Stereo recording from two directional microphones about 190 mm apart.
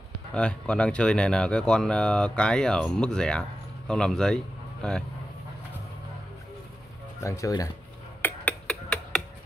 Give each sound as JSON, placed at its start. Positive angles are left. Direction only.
{"t": 0.3, "sound": "speech", "side_deg": 5}
{"t": 7.2, "sound": "speech", "side_deg": 15}
{"t": 8.2, "sound": "a sound", "side_deg": 10}